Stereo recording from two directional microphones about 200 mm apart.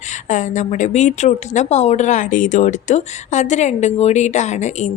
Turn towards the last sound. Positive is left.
turn(degrees=35)  # may be behind; listen again after turning